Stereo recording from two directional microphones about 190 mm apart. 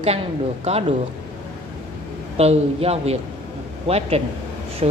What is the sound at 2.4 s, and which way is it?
A man's voice, 30° right (ahead or behind).